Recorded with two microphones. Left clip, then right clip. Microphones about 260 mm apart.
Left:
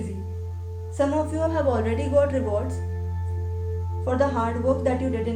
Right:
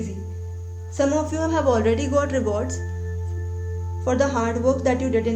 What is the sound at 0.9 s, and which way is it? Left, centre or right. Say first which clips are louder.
Speech: right 2 dB; right.